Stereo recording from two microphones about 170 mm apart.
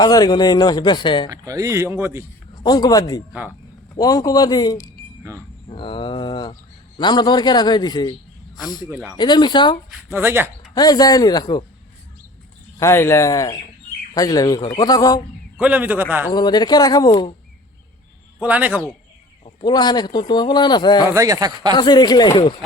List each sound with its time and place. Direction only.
0.0 s a man's voice: 25° left (ahead or behind)
1.3 s speech: 20° right (ahead or behind)
2.6 s a man's voice: 25° left (ahead or behind)
8.9 s speech: 10° right (ahead or behind)
9.1 s a man's voice: 25° left (ahead or behind)
10.1 s speech: 15° right (ahead or behind)
10.8 s a man's voice: 20° left (ahead or behind)
12.8 s a man's voice: 15° left (ahead or behind)
15.5 s speech: 10° right (ahead or behind)
16.3 s a man's voice: 25° left (ahead or behind)
18.3 s speech: 10° right (ahead or behind)
19.6 s a man's voice: 25° left (ahead or behind)
21.1 s speech: 20° right (ahead or behind)
21.8 s a man's voice: 25° left (ahead or behind)